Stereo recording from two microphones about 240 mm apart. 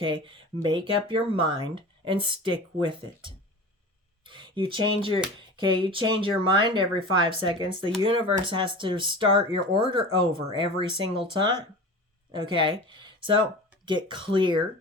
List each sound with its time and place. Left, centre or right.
0.0 s speech: right